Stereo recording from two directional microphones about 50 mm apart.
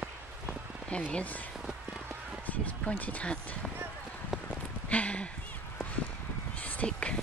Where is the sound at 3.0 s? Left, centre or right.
Left.